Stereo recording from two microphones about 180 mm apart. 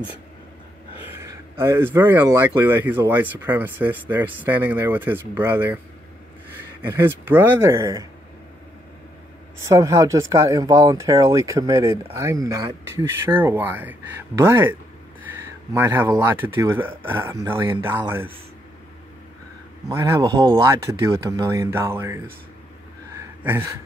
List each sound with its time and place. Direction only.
1.1 s speech: 15° right (ahead or behind)
9.6 s speech: 15° right (ahead or behind)
19.9 s speech: 15° right (ahead or behind)
23.4 s a sound: 10° right (ahead or behind)